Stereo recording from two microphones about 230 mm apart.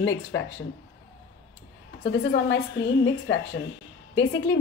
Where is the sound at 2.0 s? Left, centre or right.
Left.